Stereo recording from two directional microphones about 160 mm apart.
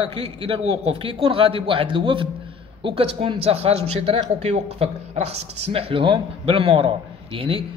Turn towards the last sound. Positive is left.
turn(degrees=-30)  # may be behind; listen again after turning